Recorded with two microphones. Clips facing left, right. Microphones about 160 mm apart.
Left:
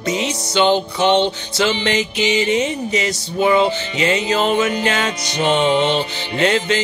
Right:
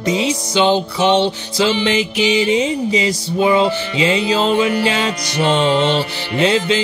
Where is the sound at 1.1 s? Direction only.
20° left (ahead or behind).